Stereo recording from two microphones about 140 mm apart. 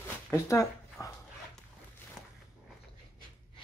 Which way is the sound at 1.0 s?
20° left (ahead or behind).